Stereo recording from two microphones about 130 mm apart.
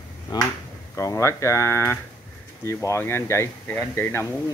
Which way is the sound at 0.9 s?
20° left (ahead or behind).